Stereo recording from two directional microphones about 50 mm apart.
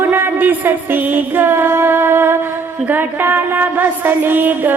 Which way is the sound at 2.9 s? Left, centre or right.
Right.